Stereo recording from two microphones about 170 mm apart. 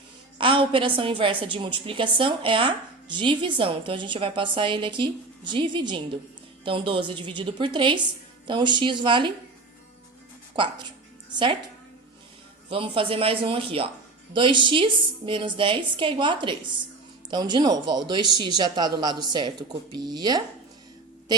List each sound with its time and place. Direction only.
0.3 s a woman's voice: 30° right (ahead or behind)
10.5 s speech: 30° right (ahead or behind)
12.7 s a man's voice: 30° right (ahead or behind)